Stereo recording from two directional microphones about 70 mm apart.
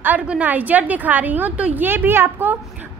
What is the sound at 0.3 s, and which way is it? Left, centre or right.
A woman's voice, right.